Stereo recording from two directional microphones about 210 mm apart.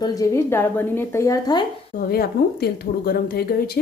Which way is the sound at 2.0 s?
50° left (ahead or behind).